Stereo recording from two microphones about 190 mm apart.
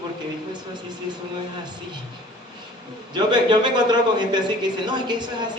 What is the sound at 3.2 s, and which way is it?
A man's voice, 25° right (ahead or behind).